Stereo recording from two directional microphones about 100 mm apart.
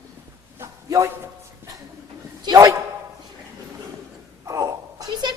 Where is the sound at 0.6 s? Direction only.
30° right (ahead or behind).